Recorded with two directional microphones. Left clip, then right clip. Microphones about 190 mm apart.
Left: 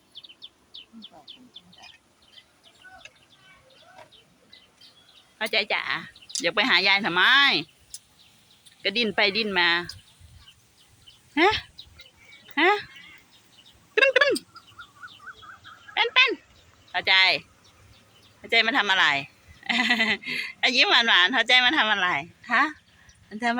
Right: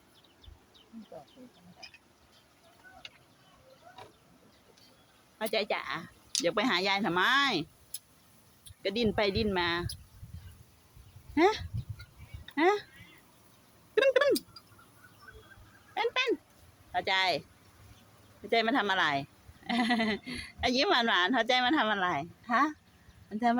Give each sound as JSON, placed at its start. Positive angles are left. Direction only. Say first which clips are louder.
{"t": 5.4, "sound": "speech", "louder": "left 6 dB", "side_deg": -5}
{"t": 8.8, "sound": "speech", "louder": "left 7 dB", "side_deg": -5}
{"t": 11.3, "sound": "speech", "louder": "left 5 dB", "side_deg": 0}
{"t": 13.9, "sound": "a sound", "louder": "left 5 dB", "side_deg": 0}
{"t": 16.0, "sound": "fowl", "louder": "left 10 dB", "side_deg": -15}
{"t": 16.9, "sound": "speech", "louder": "left 9 dB", "side_deg": -15}
{"t": 18.4, "sound": "speech", "louder": "left 7 dB", "side_deg": -20}